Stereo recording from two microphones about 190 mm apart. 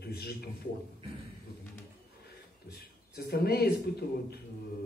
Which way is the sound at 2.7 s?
55° left (ahead or behind).